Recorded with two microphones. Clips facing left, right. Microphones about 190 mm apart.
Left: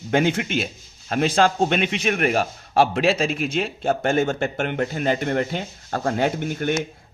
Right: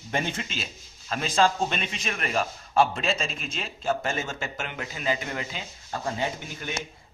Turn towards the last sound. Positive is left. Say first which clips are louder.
# left 10 dB
turn(degrees=70)  # may be behind; listen again after turning